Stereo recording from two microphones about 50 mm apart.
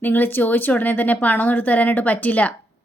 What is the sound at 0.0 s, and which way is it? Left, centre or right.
Speech, left.